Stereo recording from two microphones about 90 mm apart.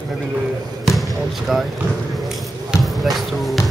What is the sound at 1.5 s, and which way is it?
Speech, centre (ahead or behind).